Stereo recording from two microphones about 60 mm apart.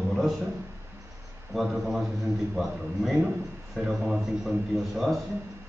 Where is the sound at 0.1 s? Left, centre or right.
Centre.